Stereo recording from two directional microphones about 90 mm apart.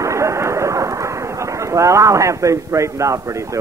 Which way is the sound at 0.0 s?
35° right (ahead or behind).